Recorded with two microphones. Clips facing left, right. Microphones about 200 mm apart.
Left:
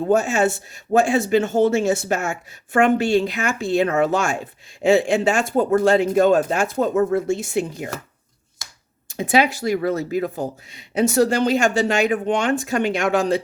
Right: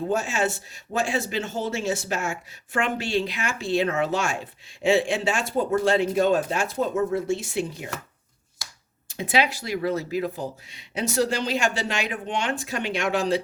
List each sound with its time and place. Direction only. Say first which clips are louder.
0.1 s speech: left 9 dB; 45° left (ahead or behind)
9.0 s speech: left 5 dB; 45° left (ahead or behind)